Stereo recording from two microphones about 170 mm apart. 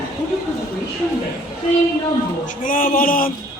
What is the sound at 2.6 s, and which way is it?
Speech, 55° left (ahead or behind).